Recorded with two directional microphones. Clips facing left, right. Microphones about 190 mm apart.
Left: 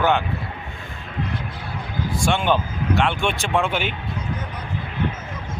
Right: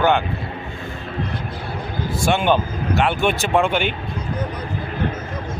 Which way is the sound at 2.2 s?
5° right (ahead or behind).